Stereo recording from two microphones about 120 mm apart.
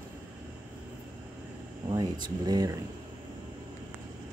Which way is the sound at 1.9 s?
35° right (ahead or behind).